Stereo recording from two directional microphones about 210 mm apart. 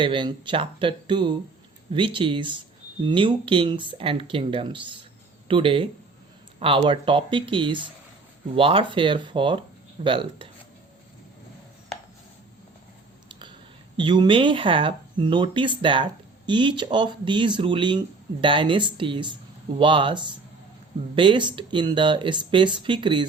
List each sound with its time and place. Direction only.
0.0 s speech: 20° right (ahead or behind)
13.9 s speech: 20° right (ahead or behind)